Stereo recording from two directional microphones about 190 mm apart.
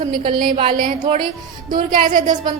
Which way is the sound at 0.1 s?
25° right (ahead or behind).